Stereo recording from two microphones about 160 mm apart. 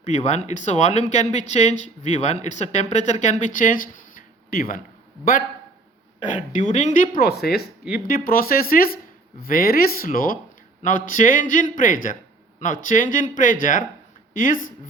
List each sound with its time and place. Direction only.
0.0 s speech: 45° left (ahead or behind); by 4.8 s 60° left (ahead or behind)
6.3 s speech: 50° left (ahead or behind)
7.3 s speech: 85° left
7.9 s speech: 65° left (ahead or behind)